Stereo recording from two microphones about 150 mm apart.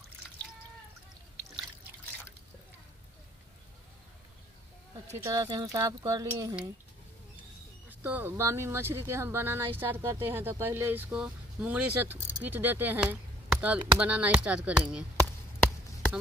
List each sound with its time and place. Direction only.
5.0 s speech: 20° right (ahead or behind)
7.9 s speech: 10° right (ahead or behind)